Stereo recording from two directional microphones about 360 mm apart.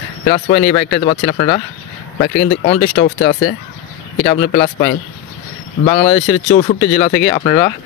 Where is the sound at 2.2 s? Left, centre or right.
Left.